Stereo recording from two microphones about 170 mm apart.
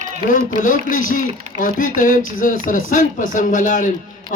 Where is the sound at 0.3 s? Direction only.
55° left (ahead or behind).